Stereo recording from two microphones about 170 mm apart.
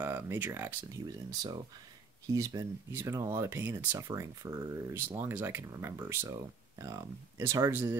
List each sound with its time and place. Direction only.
0.0 s speech: 15° right (ahead or behind)
2.2 s speech: 20° right (ahead or behind)